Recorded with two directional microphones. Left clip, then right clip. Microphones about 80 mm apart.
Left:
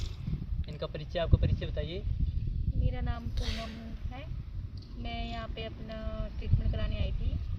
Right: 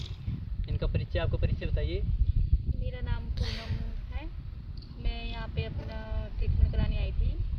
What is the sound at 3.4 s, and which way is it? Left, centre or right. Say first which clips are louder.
Speech: right 1 dB; centre.